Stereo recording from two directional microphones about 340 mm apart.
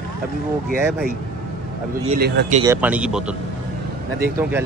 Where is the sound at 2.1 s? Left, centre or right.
Right.